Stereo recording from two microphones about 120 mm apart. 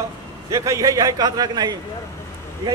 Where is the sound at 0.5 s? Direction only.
25° right (ahead or behind).